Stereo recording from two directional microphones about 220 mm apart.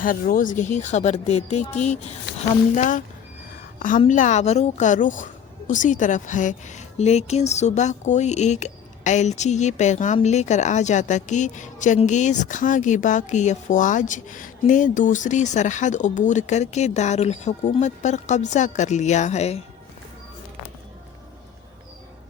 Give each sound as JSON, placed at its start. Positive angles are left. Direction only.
{"t": 0.0, "sound": "speech", "side_deg": 40}